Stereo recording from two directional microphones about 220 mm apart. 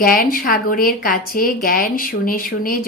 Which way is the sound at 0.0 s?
40° left (ahead or behind).